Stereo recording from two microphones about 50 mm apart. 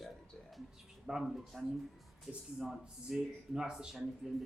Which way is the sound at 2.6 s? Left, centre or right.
Centre.